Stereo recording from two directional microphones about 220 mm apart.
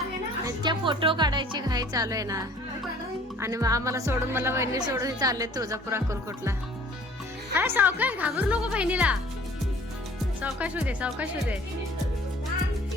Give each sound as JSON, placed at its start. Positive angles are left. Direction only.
{"t": 0.4, "sound": "speech", "side_deg": -20}
{"t": 3.4, "sound": "speech", "side_deg": -15}
{"t": 7.5, "sound": "speech", "side_deg": -10}
{"t": 10.4, "sound": "speech", "side_deg": -5}